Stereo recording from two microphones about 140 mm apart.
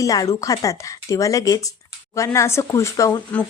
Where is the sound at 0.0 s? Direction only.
25° left (ahead or behind).